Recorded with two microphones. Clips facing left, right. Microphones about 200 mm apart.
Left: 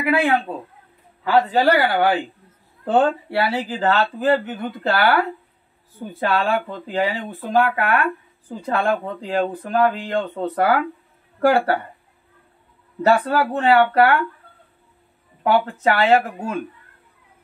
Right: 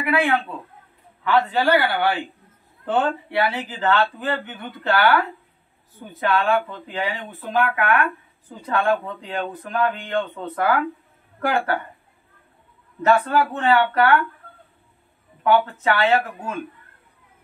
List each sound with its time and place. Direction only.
0.0 s speech: 35° left (ahead or behind)
13.0 s speech: 35° left (ahead or behind)
15.4 s speech: 35° left (ahead or behind)